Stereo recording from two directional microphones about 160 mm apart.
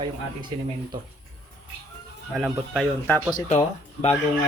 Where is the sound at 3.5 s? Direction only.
40° left (ahead or behind).